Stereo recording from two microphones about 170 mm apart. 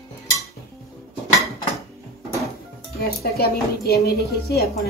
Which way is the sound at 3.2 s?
65° left (ahead or behind).